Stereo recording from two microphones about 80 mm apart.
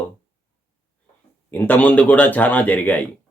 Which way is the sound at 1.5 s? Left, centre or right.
Left.